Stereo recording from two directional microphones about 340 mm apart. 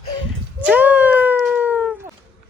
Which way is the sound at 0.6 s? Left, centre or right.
Centre.